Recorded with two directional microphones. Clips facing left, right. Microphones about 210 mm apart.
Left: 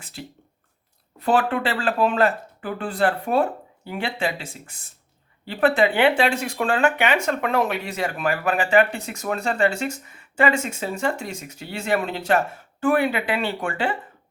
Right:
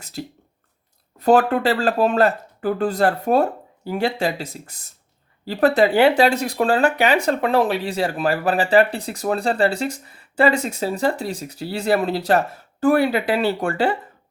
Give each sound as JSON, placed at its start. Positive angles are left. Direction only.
{"t": 0.0, "sound": "speech", "side_deg": -40}